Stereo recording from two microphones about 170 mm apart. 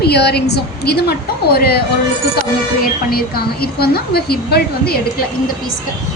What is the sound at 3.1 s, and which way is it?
A woman's voice, 65° left (ahead or behind).